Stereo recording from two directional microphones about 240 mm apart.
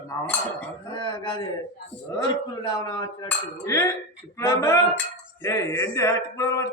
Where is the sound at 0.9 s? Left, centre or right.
Centre.